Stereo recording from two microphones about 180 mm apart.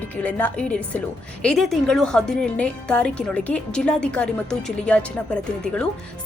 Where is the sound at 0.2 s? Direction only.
10° left (ahead or behind).